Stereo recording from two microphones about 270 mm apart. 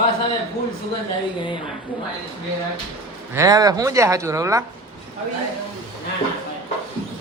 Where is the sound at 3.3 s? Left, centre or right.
Centre.